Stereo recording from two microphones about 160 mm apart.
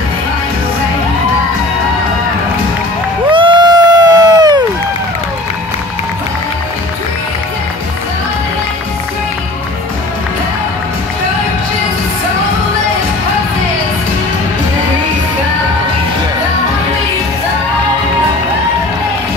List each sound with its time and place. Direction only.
3.3 s crowd: 30° right (ahead or behind)